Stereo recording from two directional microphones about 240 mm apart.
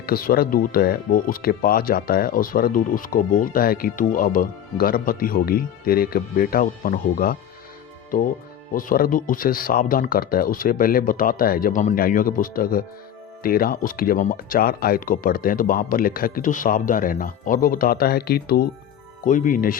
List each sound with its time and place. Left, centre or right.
0.0 s speech: left